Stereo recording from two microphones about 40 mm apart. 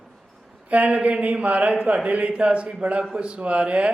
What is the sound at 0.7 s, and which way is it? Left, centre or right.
Speech, right.